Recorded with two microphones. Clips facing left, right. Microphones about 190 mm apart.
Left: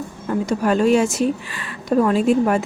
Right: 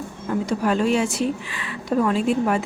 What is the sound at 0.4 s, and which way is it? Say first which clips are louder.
A woman's voice: left 4 dB; 45° left (ahead or behind).